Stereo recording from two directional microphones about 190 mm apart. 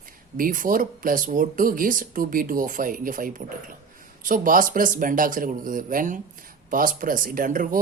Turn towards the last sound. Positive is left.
turn(degrees=-45)  # may be behind; listen again after turning